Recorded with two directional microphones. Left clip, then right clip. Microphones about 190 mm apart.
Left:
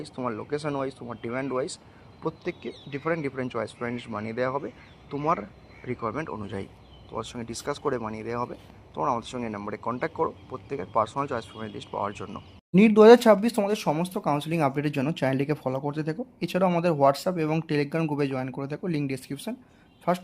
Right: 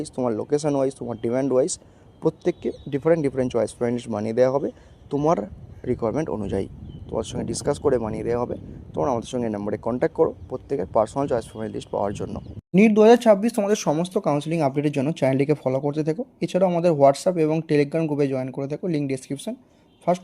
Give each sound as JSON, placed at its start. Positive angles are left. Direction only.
{"t": 0.0, "sound": "speech", "side_deg": -90}
{"t": 12.9, "sound": "speech", "side_deg": 5}
{"t": 13.7, "sound": "speech", "side_deg": -20}